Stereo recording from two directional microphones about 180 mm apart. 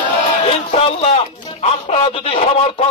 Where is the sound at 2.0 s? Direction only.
30° left (ahead or behind).